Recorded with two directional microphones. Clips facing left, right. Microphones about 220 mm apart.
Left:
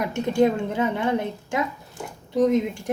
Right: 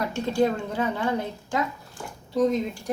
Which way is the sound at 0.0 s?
20° left (ahead or behind).